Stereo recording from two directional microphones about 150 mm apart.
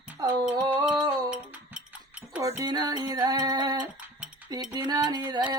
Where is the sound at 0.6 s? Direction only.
30° right (ahead or behind).